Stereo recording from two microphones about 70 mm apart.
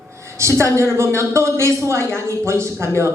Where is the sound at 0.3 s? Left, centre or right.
Right.